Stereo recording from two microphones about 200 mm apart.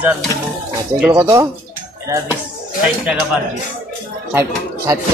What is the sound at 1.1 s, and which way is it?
Speech, 15° right (ahead or behind).